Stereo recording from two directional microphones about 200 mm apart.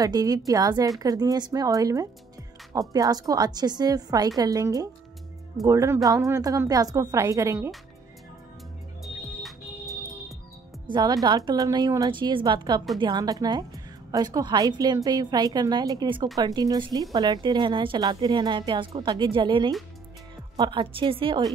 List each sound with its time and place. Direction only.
0.0 s a woman's voice: 20° right (ahead or behind)
9.0 s music: centre (ahead or behind)
10.9 s a woman's voice: 20° right (ahead or behind)